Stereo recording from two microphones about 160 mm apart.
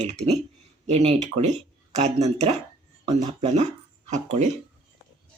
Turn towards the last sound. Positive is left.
turn(degrees=-45)  # may be behind; listen again after turning